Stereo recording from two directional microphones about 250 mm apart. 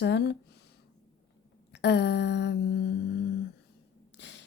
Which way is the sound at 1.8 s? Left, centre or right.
Left.